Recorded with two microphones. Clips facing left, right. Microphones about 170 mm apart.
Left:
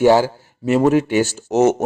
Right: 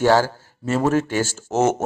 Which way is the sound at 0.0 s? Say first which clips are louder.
Left 4 dB; 15° left (ahead or behind).